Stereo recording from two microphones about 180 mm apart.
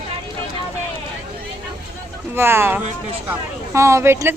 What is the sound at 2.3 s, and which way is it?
Speech, 15° right (ahead or behind).